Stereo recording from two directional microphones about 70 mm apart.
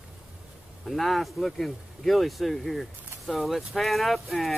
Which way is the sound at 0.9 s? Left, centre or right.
Centre.